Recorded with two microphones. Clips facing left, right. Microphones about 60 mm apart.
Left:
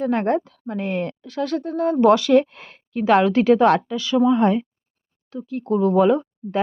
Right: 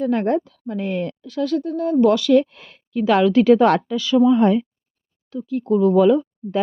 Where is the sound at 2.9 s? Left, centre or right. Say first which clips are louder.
Right 1 dB; left.